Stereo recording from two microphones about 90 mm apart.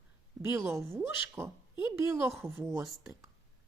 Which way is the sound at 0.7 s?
30° right (ahead or behind).